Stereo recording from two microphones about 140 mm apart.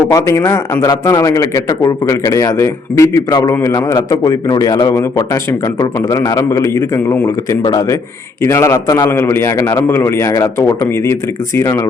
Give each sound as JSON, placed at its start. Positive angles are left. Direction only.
{"t": 0.1, "sound": "a man's voice", "side_deg": 20}